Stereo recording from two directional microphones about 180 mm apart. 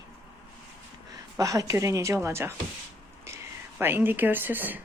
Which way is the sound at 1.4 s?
20° right (ahead or behind).